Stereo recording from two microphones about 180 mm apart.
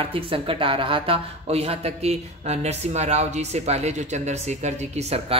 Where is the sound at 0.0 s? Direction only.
30° right (ahead or behind).